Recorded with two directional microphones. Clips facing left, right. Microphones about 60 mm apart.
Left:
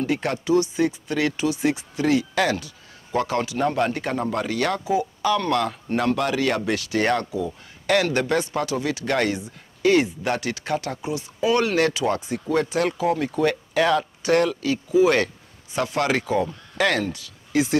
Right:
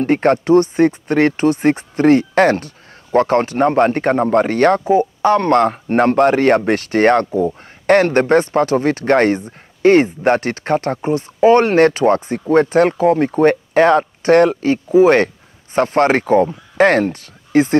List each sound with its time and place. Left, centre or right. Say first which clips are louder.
0.0 s speech: right 10 dB; right